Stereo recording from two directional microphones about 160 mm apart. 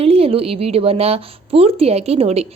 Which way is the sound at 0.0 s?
35° right (ahead or behind).